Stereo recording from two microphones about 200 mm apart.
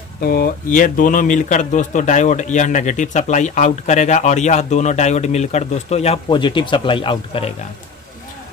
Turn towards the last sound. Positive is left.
turn(degrees=25)  # may be behind; listen again after turning